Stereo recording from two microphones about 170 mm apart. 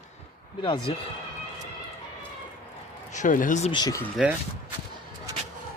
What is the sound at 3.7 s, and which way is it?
Speech, 25° left (ahead or behind).